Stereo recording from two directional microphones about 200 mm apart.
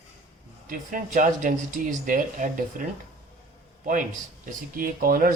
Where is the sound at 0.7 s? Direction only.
45° right (ahead or behind).